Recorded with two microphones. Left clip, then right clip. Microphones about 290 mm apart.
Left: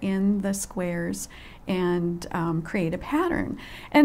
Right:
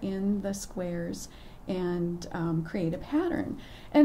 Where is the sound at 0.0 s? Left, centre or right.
Left.